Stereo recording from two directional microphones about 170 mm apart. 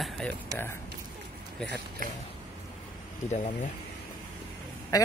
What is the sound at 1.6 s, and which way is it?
Speech, 5° left (ahead or behind).